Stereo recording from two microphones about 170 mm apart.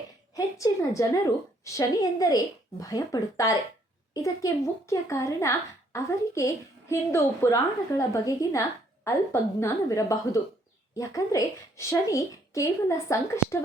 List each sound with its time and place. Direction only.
0.3 s speech: 20° left (ahead or behind)